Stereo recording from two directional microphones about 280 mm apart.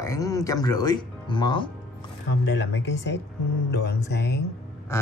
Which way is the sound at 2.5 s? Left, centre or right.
Left.